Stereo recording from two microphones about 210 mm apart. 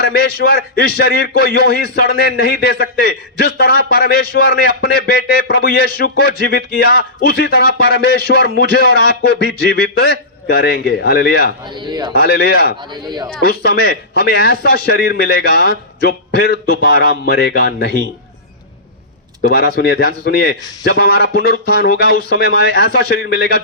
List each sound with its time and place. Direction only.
0.1 s a man's voice: 45° left (ahead or behind)
11.8 s speech: 20° right (ahead or behind)
12.1 s a man's voice: 50° left (ahead or behind)
12.9 s speech: 20° right (ahead or behind)
13.4 s a man's voice: 45° left (ahead or behind)
19.4 s a man's voice: 45° left (ahead or behind)